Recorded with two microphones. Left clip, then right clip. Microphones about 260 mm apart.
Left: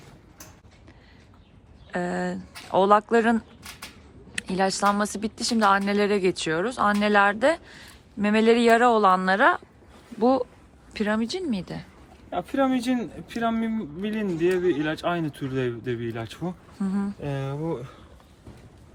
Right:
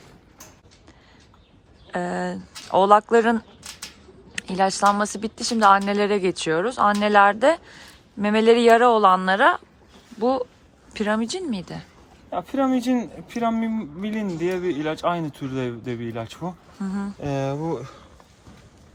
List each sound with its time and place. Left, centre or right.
1.9 s a woman's voice: centre
12.5 s a woman's voice: centre
16.4 s speech: right
16.8 s speech: centre
17.2 s speech: right